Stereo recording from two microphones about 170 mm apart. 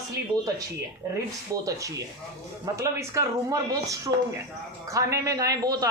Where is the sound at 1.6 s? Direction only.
20° right (ahead or behind).